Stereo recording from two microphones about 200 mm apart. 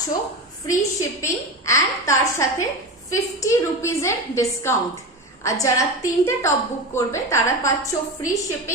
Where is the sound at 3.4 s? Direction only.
15° left (ahead or behind).